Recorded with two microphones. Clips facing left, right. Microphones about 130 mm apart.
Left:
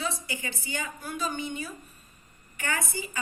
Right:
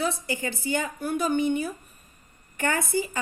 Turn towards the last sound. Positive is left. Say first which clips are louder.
# right 7 dB
turn(degrees=-50)  # may be behind; listen again after turning